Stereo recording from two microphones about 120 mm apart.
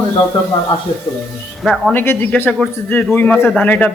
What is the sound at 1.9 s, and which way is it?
A man's voice, 15° left (ahead or behind).